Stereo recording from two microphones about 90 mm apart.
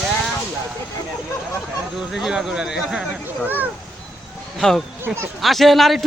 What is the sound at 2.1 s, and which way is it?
Speech, 5° right (ahead or behind).